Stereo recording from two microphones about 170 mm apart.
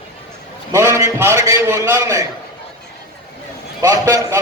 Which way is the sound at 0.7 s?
15° right (ahead or behind).